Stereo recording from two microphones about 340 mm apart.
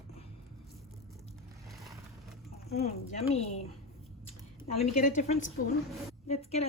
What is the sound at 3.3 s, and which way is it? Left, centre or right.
Speech, centre.